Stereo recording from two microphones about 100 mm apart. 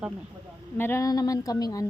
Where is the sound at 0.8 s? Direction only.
25° left (ahead or behind).